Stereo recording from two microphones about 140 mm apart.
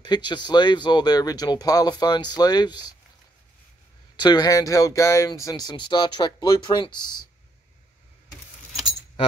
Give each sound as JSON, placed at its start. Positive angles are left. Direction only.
{"t": 0.0, "sound": "speech", "side_deg": 30}
{"t": 4.2, "sound": "speech", "side_deg": 30}